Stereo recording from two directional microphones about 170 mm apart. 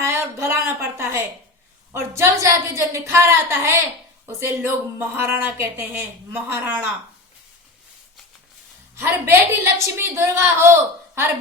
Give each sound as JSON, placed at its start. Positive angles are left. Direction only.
{"t": 0.0, "sound": "a sound", "side_deg": -15}
{"t": 1.9, "sound": "speech", "side_deg": -15}
{"t": 9.0, "sound": "speech", "side_deg": -15}